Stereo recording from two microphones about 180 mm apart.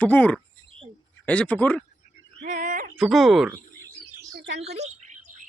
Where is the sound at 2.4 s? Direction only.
50° right (ahead or behind).